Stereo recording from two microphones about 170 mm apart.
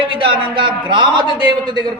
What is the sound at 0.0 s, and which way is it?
Speech, 30° right (ahead or behind).